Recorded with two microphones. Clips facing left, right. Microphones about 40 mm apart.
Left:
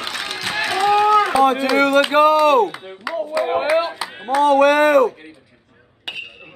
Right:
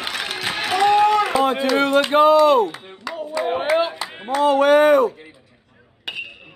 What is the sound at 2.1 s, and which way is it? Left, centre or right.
Speech, left.